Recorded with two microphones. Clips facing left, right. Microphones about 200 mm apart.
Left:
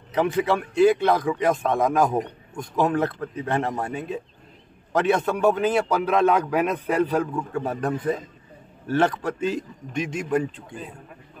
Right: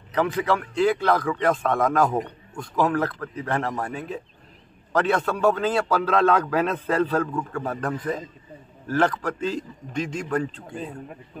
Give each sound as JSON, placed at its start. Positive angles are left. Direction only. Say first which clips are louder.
{"t": 0.1, "sound": "a man's voice", "louder": "left 1 dB", "side_deg": 20}
{"t": 8.9, "sound": "a man's voice", "louder": "left 1 dB", "side_deg": 25}